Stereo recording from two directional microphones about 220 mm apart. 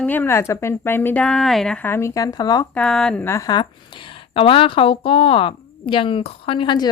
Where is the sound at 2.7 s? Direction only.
5° left (ahead or behind).